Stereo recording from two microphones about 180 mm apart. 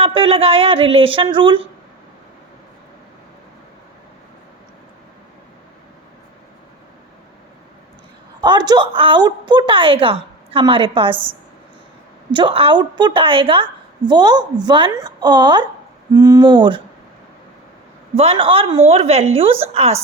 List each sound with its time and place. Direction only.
0.0 s a woman's voice: 30° right (ahead or behind)
8.4 s a woman's voice: 25° right (ahead or behind)
11.1 s a woman's voice: 10° right (ahead or behind)
12.3 s a woman's voice: 30° right (ahead or behind)
18.1 s a woman's voice: 35° right (ahead or behind)